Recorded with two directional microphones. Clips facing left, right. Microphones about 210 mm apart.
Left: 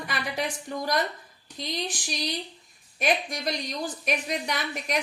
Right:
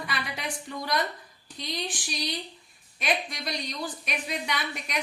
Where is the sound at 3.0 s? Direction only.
45° left (ahead or behind).